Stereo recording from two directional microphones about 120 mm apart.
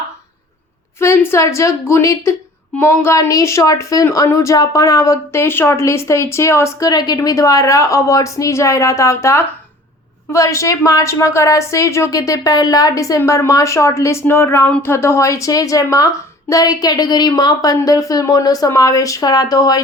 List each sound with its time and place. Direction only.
0.9 s speech: 20° left (ahead or behind)